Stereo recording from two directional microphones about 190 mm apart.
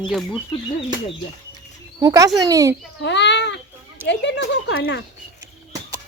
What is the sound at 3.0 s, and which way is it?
A child's voice, 65° left (ahead or behind).